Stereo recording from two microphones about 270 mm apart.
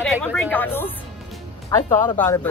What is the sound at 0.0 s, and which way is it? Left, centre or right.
Speech, centre.